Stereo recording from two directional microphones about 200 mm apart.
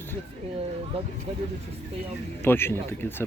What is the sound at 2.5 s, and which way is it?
Speech, 10° left (ahead or behind).